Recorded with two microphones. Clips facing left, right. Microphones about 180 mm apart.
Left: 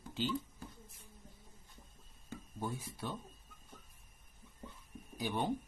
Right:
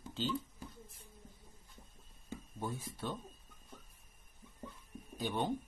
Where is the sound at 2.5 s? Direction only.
5° left (ahead or behind).